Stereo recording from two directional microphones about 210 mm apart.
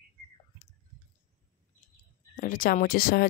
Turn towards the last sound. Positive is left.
turn(degrees=45)  # may be behind; listen again after turning